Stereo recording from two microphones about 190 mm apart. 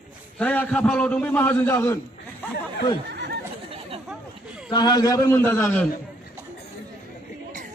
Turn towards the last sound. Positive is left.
turn(degrees=5)  # may be behind; listen again after turning